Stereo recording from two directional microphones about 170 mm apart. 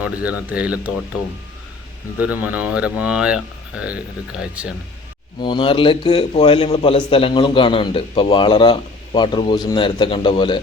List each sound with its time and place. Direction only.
0.0 s speech: 10° right (ahead or behind)
2.1 s speech: 10° right (ahead or behind)
5.4 s a man's voice: 30° left (ahead or behind)